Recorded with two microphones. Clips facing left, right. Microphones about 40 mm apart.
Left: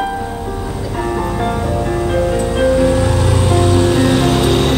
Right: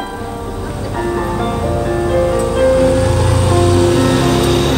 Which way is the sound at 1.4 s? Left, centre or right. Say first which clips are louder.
Right 1 dB; centre.